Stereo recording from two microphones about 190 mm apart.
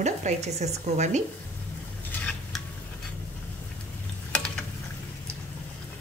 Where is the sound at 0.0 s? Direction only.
35° right (ahead or behind).